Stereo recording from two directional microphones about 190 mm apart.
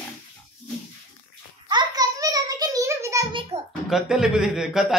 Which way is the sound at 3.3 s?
25° right (ahead or behind).